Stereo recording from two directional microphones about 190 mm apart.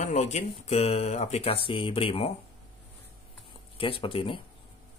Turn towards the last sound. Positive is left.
turn(degrees=30)  # may be behind; listen again after turning